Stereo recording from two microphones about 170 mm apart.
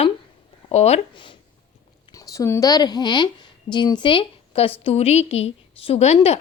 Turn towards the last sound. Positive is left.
turn(degrees=40)  # may be behind; listen again after turning